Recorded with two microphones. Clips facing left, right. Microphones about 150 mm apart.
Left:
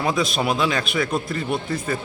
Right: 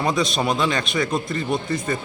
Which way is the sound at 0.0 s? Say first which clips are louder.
Even; 5° left (ahead or behind).